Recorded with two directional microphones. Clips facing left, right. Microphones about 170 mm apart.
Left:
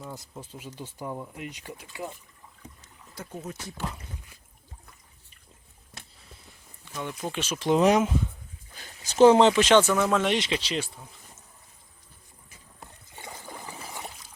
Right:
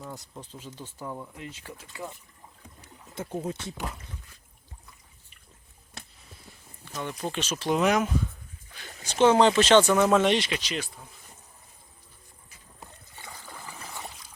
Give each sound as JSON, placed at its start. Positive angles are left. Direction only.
{"t": 0.1, "sound": "speech", "side_deg": 0}
{"t": 0.8, "sound": "speech", "side_deg": 15}
{"t": 3.2, "sound": "speech", "side_deg": -25}
{"t": 6.9, "sound": "speech", "side_deg": 5}
{"t": 7.8, "sound": "speech", "side_deg": 30}
{"t": 9.1, "sound": "speech", "side_deg": 35}
{"t": 9.4, "sound": "speech", "side_deg": 15}
{"t": 9.8, "sound": "speech", "side_deg": -5}
{"t": 10.3, "sound": "speech", "side_deg": 25}
{"t": 13.1, "sound": "trickle", "side_deg": 20}